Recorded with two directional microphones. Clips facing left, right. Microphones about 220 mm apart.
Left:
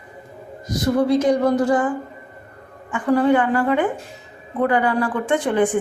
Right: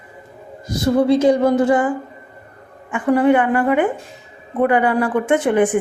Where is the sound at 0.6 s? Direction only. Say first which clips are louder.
Right 3 dB; 30° right (ahead or behind).